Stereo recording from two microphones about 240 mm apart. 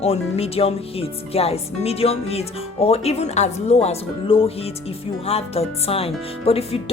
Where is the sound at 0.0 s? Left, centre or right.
Left.